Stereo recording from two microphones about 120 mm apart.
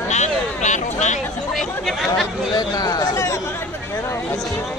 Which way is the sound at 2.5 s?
35° left (ahead or behind).